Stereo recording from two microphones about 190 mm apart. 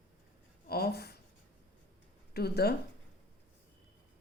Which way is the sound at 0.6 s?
55° left (ahead or behind).